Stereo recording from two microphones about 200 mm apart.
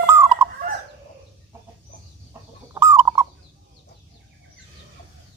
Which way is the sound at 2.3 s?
15° right (ahead or behind).